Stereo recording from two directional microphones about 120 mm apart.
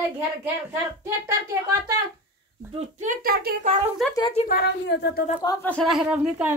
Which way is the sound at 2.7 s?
80° right.